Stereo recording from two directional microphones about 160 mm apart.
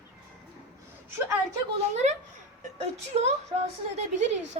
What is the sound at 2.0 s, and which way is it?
A woman's voice, 50° right (ahead or behind).